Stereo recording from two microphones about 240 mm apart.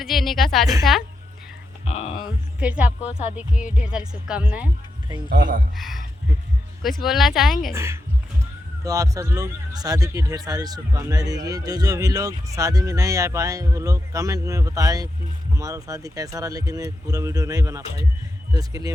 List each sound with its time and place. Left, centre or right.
0.0 s speech: centre
1.8 s a sound: left
2.6 s speech: centre
5.3 s speech: right
5.7 s speech: centre
7.0 s speech: centre
7.7 s a man's voice: centre